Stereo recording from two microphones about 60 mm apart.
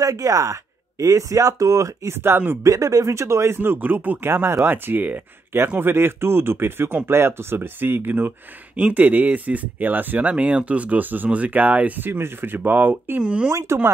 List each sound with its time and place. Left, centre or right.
0.0 s speech: right
2.0 s speech: right
2.6 s speech: right
12.1 s speech: right
13.2 s speech: centre
13.5 s speech: right